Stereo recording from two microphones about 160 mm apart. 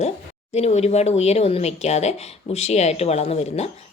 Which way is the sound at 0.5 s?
45° left (ahead or behind).